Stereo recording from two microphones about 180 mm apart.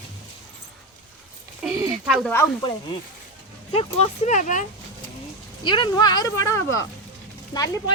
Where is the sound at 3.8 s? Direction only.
35° left (ahead or behind).